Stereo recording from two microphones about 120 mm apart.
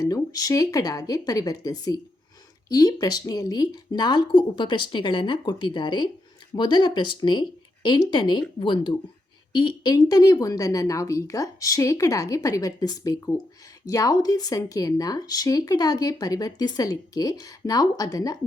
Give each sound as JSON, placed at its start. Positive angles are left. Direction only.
{"t": 0.0, "sound": "speech", "side_deg": 30}